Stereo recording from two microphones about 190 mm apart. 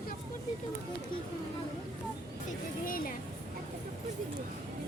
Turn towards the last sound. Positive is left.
turn(degrees=45)  # may be behind; listen again after turning